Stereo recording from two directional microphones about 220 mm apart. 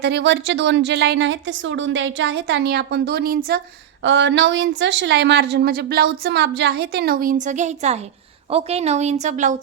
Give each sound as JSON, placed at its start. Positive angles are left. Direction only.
{"t": 0.0, "sound": "a woman's voice", "side_deg": -50}